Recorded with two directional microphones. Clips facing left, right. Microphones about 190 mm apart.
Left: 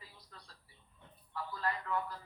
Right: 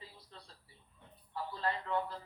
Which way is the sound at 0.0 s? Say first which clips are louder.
Right 3 dB; 25° right (ahead or behind).